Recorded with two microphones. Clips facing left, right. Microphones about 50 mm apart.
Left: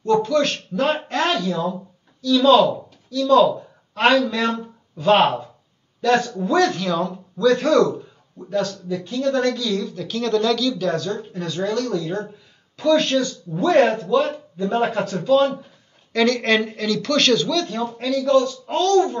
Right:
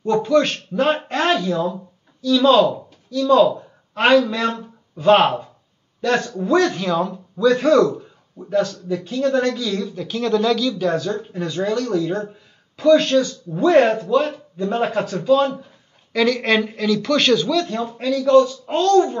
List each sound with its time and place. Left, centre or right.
0.0 s speech: centre
5.9 s speech: centre